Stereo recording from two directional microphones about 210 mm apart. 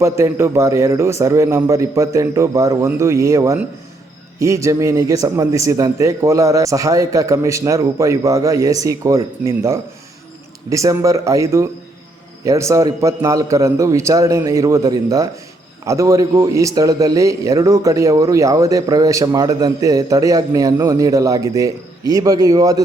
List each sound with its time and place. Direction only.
0.0 s a man's voice: 15° right (ahead or behind)